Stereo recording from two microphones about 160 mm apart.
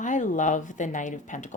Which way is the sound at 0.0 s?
50° left (ahead or behind).